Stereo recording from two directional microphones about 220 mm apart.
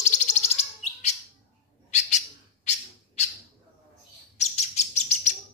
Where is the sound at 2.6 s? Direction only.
30° left (ahead or behind).